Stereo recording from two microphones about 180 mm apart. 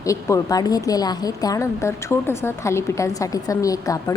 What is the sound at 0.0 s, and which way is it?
A woman's voice, 15° left (ahead or behind).